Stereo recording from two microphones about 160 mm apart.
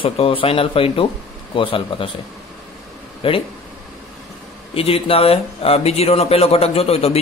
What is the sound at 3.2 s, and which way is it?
Speech, 35° left (ahead or behind).